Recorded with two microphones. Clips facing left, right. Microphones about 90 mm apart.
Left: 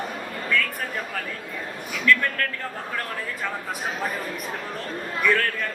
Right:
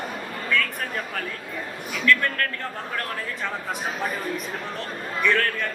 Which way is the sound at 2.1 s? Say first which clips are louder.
Even; 5° left (ahead or behind).